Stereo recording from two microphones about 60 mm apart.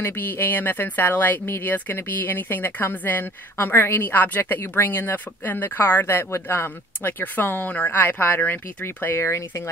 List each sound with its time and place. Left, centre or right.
0.0 s speech: left